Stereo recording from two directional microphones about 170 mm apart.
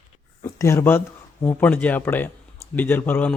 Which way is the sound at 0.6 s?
15° left (ahead or behind).